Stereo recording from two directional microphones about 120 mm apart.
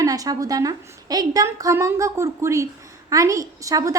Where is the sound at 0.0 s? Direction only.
30° right (ahead or behind).